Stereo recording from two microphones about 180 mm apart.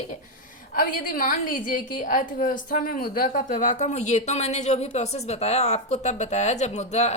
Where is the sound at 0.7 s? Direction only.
50° left (ahead or behind).